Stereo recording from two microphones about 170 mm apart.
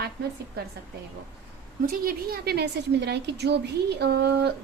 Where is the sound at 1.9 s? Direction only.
60° right (ahead or behind).